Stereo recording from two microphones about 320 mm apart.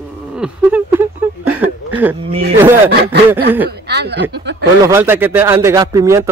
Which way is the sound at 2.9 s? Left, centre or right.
Right.